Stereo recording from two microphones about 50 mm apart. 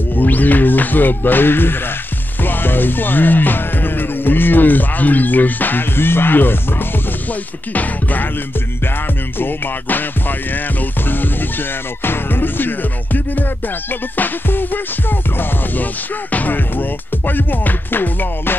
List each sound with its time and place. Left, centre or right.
0.1 s speech: left
2.4 s music: left
7.7 s speech: left
9.4 s speech: left
12.0 s music: left
14.1 s speech: left